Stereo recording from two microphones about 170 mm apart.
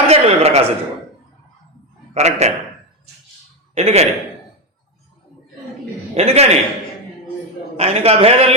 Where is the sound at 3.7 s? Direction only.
40° right (ahead or behind).